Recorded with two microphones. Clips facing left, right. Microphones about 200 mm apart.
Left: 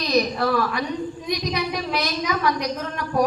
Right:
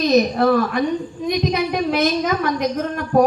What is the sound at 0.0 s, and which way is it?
Speech, 50° right (ahead or behind).